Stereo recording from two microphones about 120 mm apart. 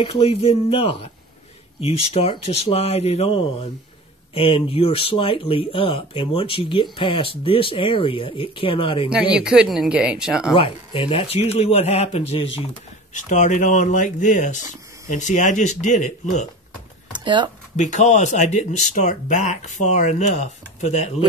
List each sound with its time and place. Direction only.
0.0 s a man's voice: 50° left (ahead or behind)
9.3 s speech: 5° right (ahead or behind)
10.5 s a man's voice: 45° left (ahead or behind)
13.1 s speech: 90° left
17.2 s speech: 40° right (ahead or behind)
17.7 s speech: 80° left